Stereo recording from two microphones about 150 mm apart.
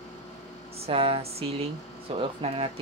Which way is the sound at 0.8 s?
40° right (ahead or behind).